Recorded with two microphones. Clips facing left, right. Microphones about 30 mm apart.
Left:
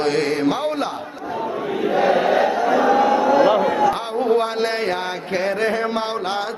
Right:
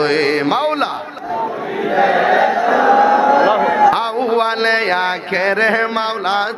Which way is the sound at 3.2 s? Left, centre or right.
Right.